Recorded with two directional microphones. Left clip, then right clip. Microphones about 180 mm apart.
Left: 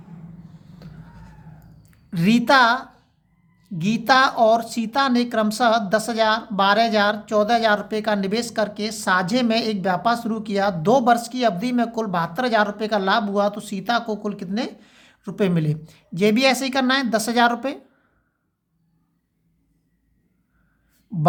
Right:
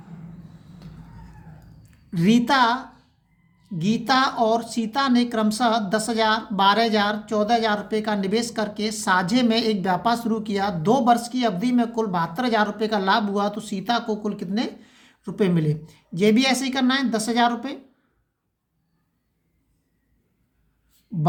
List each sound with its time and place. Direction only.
0.8 s a sound: 35° left (ahead or behind)
1.8 s a woman's voice: 35° left (ahead or behind)
21.1 s speech: 30° left (ahead or behind)